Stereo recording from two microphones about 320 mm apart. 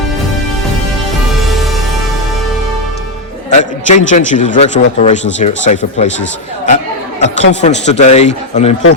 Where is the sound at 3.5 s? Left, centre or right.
Left.